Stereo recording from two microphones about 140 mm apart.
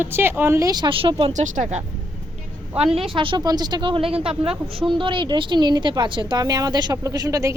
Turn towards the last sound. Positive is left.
turn(degrees=-25)  # may be behind; listen again after turning